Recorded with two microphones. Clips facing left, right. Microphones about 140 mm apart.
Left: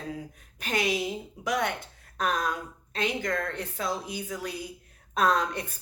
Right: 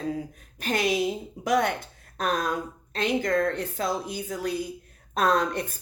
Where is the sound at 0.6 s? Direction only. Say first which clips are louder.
Right 3 dB; 50° right (ahead or behind).